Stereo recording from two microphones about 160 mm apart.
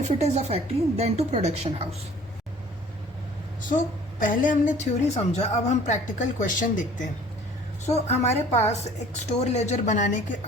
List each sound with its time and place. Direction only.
0.0 s a woman's voice: 45° right (ahead or behind)
4.2 s a woman's voice: 55° left (ahead or behind)
7.9 s a woman's voice: 40° left (ahead or behind)